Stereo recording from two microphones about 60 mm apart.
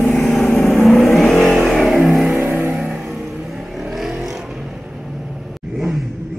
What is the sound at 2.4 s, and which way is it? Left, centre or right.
Vehicle, right.